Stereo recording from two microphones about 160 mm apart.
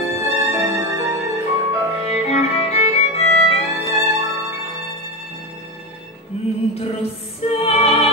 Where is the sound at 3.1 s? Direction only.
40° left (ahead or behind).